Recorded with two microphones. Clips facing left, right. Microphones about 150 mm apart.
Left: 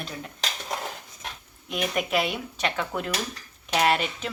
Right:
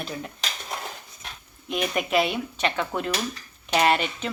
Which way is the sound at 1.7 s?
5° left (ahead or behind).